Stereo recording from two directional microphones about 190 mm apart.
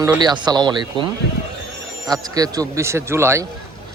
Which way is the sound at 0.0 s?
20° right (ahead or behind).